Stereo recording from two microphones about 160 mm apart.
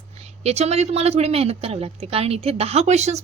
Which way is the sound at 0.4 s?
40° right (ahead or behind).